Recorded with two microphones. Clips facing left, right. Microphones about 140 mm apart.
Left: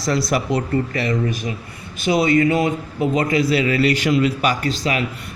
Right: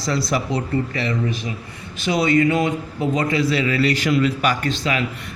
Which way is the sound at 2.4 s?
35° left (ahead or behind).